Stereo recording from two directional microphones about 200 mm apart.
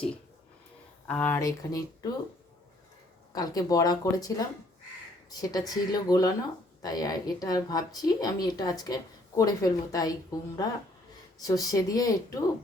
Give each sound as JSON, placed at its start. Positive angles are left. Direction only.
{"t": 1.0, "sound": "speech", "side_deg": 5}
{"t": 3.3, "sound": "speech", "side_deg": 20}